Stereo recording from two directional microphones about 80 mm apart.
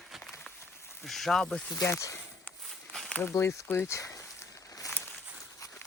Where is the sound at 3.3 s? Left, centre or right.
Left.